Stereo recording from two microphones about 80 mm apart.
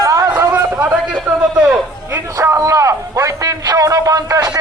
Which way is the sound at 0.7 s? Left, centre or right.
Right.